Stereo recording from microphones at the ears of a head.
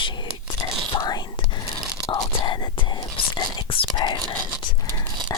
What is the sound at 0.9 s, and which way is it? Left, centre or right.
Whispering, left.